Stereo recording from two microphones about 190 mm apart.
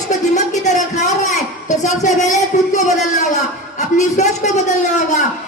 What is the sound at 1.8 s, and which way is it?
Speech, 40° left (ahead or behind).